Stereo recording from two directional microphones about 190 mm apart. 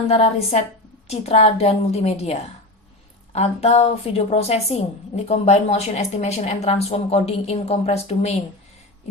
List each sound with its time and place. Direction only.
0.1 s a woman's voice: 35° left (ahead or behind)